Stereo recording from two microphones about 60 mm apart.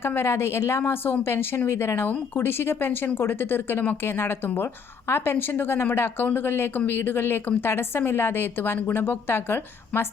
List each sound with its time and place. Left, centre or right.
0.0 s speech: left
0.8 s speech: left